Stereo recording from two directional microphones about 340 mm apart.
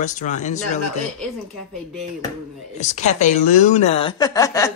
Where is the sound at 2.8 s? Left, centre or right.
Left.